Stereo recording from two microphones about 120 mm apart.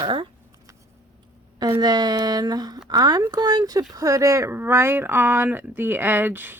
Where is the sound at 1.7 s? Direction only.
35° right (ahead or behind).